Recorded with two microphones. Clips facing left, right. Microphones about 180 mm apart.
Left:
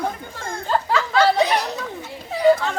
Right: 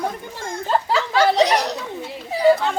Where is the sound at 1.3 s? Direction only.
85° right.